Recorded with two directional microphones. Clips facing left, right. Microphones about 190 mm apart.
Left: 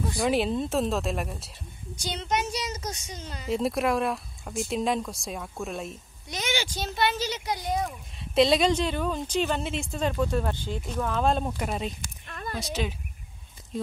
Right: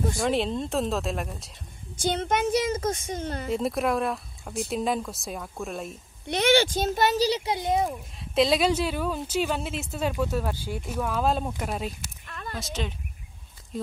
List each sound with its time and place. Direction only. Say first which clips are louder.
0.2 s a woman's voice: left 3 dB; 5° left (ahead or behind)
2.0 s speech: right 4 dB; 50° right (ahead or behind)
3.5 s a woman's voice: left 1 dB; centre (ahead or behind)
6.2 s speech: right 10 dB; 60° right (ahead or behind); by 7.9 s 25° right (ahead or behind)
8.2 s a woman's voice: left 1 dB; centre (ahead or behind)
12.3 s a sound: left 2 dB; 40° left (ahead or behind)
12.5 s a woman's voice: left 2 dB; centre (ahead or behind)